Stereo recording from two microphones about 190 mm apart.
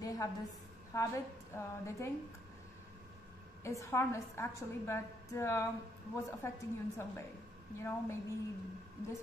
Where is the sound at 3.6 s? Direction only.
15° left (ahead or behind).